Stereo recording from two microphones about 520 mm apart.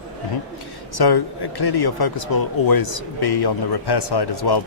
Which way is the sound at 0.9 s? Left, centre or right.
Left.